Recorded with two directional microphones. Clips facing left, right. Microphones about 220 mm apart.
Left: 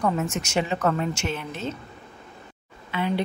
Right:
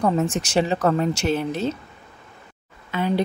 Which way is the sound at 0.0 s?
35° right (ahead or behind).